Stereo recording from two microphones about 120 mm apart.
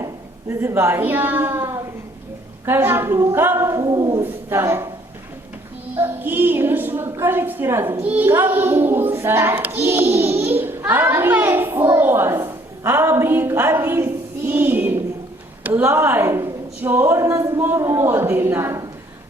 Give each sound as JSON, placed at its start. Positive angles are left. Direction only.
{"t": 0.6, "sound": "a woman's voice", "side_deg": -20}
{"t": 4.2, "sound": "speech", "side_deg": -20}
{"t": 6.0, "sound": "a woman's voice", "side_deg": -15}